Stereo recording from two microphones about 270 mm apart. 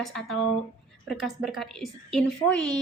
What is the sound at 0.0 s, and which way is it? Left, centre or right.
A woman's voice, centre.